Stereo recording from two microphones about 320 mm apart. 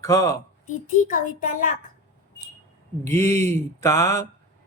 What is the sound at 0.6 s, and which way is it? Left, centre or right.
A child's voice, left.